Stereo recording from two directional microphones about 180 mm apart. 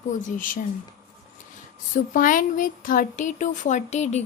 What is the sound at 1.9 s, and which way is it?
A woman's voice, 50° left (ahead or behind).